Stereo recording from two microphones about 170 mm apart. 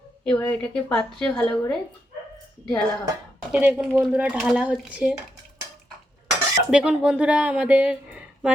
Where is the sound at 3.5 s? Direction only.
10° right (ahead or behind).